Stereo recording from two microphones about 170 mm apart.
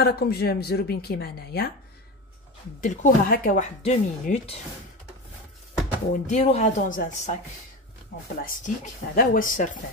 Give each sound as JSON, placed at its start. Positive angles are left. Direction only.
{"t": 0.0, "sound": "a woman's voice", "side_deg": 70}
{"t": 2.8, "sound": "speech", "side_deg": 50}
{"t": 6.2, "sound": "speech", "side_deg": 40}
{"t": 8.4, "sound": "speech", "side_deg": 55}